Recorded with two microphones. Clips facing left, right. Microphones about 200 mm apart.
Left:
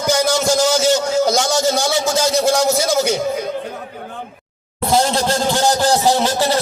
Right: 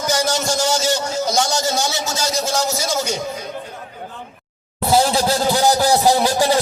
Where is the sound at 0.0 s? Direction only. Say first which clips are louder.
Left 4 dB; 60° left (ahead or behind).